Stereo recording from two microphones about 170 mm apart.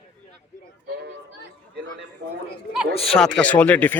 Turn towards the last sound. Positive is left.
turn(degrees=10)  # may be behind; listen again after turning